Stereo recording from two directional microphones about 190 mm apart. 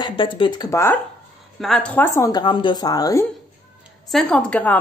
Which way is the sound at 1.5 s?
Centre (ahead or behind).